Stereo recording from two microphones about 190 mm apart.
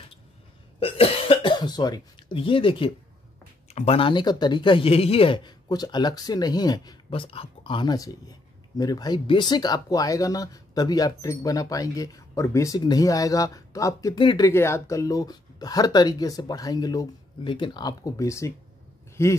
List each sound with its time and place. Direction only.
0.7 s cough: 30° left (ahead or behind)
3.6 s speech: 35° left (ahead or behind); by 19.3 s 15° left (ahead or behind)